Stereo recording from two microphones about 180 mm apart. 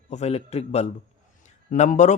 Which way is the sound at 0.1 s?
35° left (ahead or behind).